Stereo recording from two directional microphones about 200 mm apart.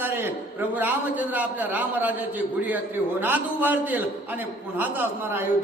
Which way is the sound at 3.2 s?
10° right (ahead or behind).